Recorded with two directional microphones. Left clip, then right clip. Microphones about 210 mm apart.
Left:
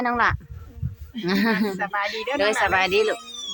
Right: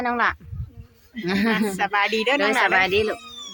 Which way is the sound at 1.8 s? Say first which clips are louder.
Right 5 dB; 55° right (ahead or behind).